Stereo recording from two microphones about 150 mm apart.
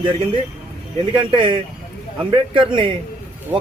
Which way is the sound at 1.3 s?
35° right (ahead or behind).